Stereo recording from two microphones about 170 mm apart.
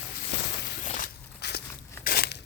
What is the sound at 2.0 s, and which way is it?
Crumpling, 65° left (ahead or behind).